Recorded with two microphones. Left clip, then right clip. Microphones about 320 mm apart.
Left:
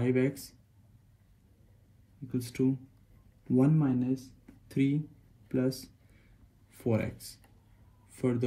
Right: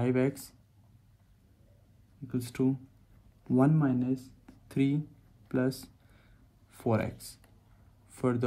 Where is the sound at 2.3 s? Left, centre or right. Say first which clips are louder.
Even; centre.